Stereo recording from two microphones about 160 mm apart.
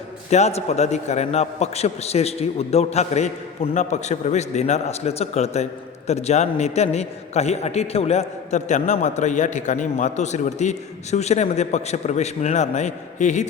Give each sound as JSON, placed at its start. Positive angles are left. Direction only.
{"t": 0.3, "sound": "a man's voice", "side_deg": 45}